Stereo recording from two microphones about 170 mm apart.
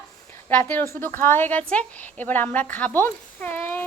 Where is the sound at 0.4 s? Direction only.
10° left (ahead or behind).